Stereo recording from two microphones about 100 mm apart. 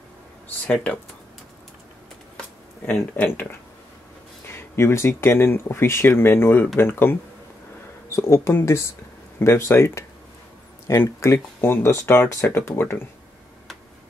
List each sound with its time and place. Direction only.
2.9 s speech: 20° left (ahead or behind)
4.5 s speech: 25° left (ahead or behind)